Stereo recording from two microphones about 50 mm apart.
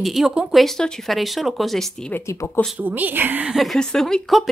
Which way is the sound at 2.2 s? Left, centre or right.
Left.